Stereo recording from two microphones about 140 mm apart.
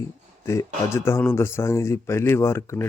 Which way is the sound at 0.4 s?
20° left (ahead or behind).